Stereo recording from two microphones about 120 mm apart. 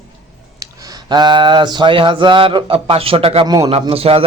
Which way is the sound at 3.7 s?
55° right (ahead or behind).